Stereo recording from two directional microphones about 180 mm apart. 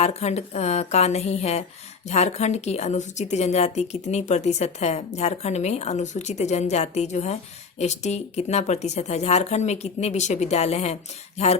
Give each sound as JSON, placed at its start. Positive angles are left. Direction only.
{"t": 0.0, "sound": "a woman's voice", "side_deg": 35}